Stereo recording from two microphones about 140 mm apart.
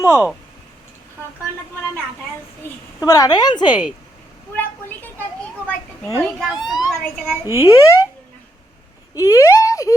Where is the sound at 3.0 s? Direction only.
25° left (ahead or behind).